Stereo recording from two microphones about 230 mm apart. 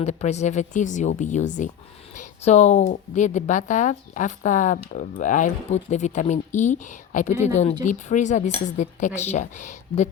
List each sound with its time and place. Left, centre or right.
0.0 s a woman's voice: left